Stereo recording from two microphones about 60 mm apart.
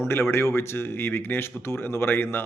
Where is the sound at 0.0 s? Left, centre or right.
Left.